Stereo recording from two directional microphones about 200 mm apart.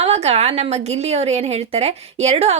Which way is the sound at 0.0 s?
30° right (ahead or behind).